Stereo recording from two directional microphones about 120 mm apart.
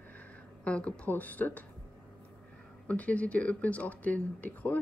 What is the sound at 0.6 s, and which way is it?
Speech, 10° left (ahead or behind).